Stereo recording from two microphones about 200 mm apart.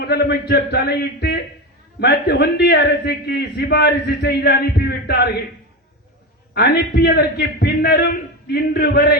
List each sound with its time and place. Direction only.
0.0 s a man's voice: 55° left (ahead or behind)
6.5 s a man's voice: 55° left (ahead or behind)